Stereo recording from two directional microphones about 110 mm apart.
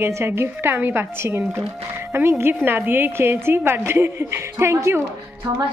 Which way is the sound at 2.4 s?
20° right (ahead or behind).